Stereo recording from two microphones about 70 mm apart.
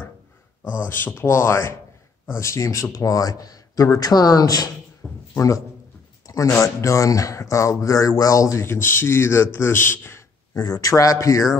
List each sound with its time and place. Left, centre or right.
0.8 s speech: left
5.0 s a sound: centre
6.2 s speech: left
10.5 s speech: left